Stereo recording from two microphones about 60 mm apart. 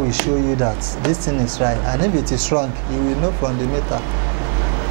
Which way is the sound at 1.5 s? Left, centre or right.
Right.